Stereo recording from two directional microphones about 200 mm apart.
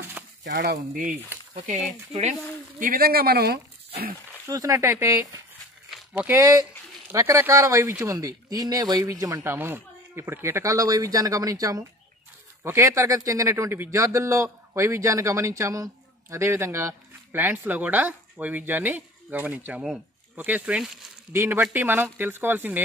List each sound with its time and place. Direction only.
0.2 s a sound: 10° right (ahead or behind)
0.6 s speech: 45° right (ahead or behind)
4.5 s a man's voice: 15° right (ahead or behind)